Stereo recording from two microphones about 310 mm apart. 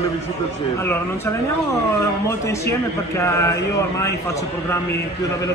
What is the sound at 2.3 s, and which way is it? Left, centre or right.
A man's voice, centre.